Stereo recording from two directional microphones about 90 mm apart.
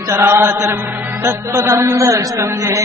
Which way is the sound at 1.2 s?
30° right (ahead or behind).